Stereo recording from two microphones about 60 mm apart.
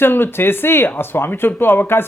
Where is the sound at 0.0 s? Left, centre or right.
Left.